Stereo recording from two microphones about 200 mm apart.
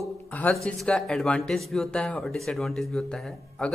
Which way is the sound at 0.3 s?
10° left (ahead or behind).